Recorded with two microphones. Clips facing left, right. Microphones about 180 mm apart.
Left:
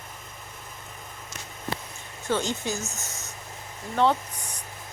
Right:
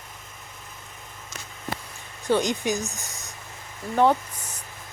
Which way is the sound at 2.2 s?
15° right (ahead or behind).